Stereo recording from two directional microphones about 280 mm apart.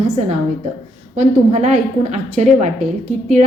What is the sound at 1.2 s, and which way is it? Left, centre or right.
A woman's voice, right.